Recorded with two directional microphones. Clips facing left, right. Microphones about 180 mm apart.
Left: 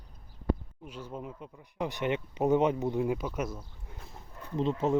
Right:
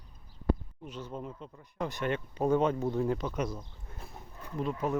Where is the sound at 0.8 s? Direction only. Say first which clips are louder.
Right 1 dB; 10° left (ahead or behind).